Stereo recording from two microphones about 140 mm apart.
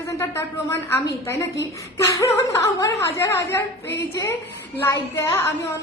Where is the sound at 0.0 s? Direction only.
20° left (ahead or behind).